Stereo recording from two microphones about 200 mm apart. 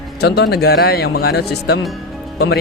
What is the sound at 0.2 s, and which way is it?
Speech, 55° left (ahead or behind).